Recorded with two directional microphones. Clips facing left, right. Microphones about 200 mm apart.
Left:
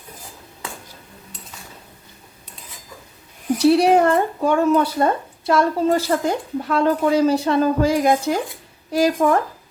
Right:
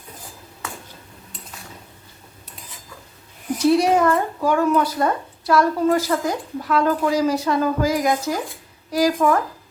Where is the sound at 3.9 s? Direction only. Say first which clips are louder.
Left 2 dB; 30° left (ahead or behind).